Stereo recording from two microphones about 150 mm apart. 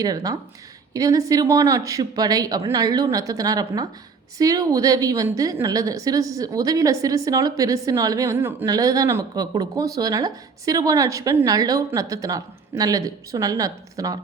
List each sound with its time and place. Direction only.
0.0 s a woman's voice: 25° right (ahead or behind)